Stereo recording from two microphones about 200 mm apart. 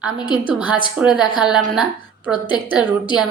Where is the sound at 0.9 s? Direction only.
5° right (ahead or behind).